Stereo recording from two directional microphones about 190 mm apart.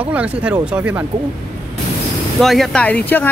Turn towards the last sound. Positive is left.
turn(degrees=10)  # may be behind; listen again after turning